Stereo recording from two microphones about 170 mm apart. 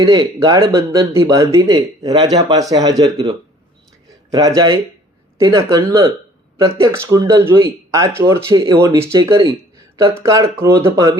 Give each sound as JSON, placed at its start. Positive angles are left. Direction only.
{"t": 0.0, "sound": "a man's voice", "side_deg": -20}